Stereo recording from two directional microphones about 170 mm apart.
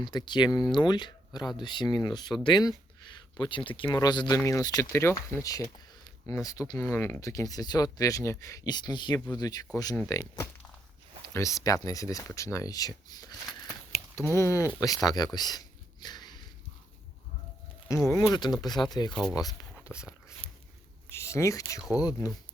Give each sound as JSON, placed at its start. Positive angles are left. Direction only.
{"t": 0.0, "sound": "speech", "side_deg": 25}
{"t": 14.3, "sound": "speech", "side_deg": 15}
{"t": 17.8, "sound": "speech", "side_deg": 20}
{"t": 19.8, "sound": "speech", "side_deg": -5}
{"t": 21.1, "sound": "speech", "side_deg": 15}